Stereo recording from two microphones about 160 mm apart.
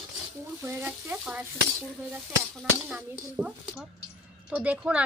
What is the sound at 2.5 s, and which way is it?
A woman's voice, centre (ahead or behind).